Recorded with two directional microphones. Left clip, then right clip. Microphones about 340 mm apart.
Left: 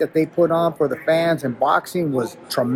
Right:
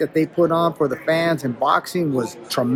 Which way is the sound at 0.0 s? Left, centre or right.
Centre.